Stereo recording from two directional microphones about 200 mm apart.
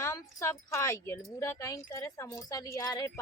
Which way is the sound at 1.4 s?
15° left (ahead or behind).